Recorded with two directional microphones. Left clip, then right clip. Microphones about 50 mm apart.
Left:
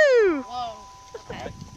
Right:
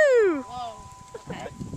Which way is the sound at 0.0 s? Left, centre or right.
Centre.